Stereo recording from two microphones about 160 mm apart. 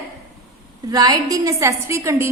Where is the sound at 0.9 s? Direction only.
25° right (ahead or behind).